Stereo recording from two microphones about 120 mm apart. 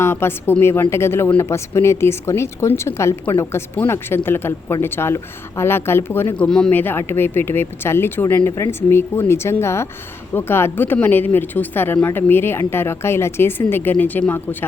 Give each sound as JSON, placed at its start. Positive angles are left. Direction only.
{"t": 0.0, "sound": "a woman's voice", "side_deg": 20}